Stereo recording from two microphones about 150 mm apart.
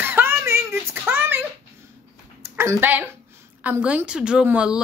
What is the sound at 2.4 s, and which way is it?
A woman's voice, 15° right (ahead or behind).